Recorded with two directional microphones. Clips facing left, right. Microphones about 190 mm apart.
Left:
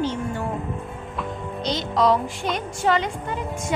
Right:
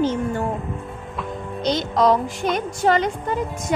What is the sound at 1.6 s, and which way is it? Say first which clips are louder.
Speech: right 3 dB; 45° right (ahead or behind).